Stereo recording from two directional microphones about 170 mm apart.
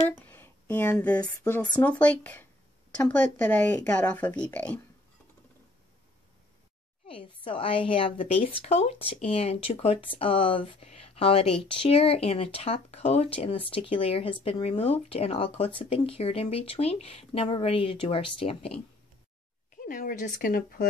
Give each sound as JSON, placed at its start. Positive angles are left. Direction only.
{"t": 0.2, "sound": "a sound", "side_deg": 10}
{"t": 1.4, "sound": "speech", "side_deg": 15}
{"t": 7.1, "sound": "speech", "side_deg": 30}
{"t": 19.8, "sound": "speech", "side_deg": 55}